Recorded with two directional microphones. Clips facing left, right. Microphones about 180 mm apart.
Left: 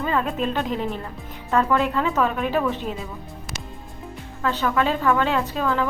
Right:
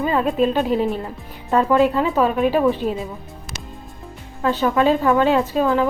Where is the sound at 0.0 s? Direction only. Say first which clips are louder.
Right 4 dB; 20° right (ahead or behind).